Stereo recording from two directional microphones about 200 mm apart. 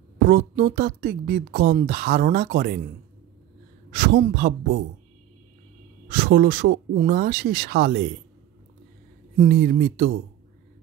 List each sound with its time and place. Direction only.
0.3 s speech: 50° right (ahead or behind)
3.9 s a man's voice: 55° right (ahead or behind)
6.0 s speech: 55° right (ahead or behind)
7.0 s speech: 45° right (ahead or behind)
9.5 s speech: 50° right (ahead or behind)